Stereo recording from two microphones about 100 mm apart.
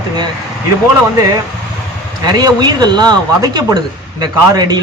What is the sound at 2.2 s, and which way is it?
Speech, 45° right (ahead or behind).